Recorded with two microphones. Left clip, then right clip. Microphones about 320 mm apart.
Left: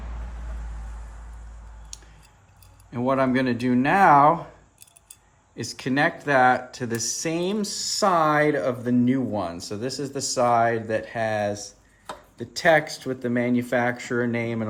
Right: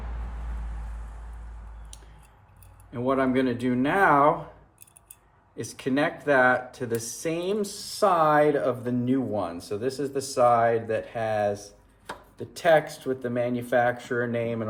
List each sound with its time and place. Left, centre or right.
3.1 s speech: left
5.5 s speech: left